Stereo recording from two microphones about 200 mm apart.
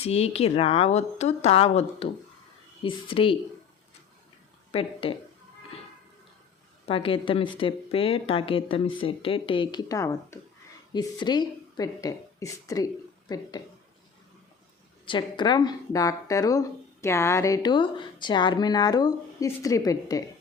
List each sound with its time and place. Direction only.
0.0 s a woman's voice: 30° left (ahead or behind)
4.7 s speech: 25° left (ahead or behind)
6.8 s a woman's voice: 25° left (ahead or behind)
15.0 s speech: 25° left (ahead or behind)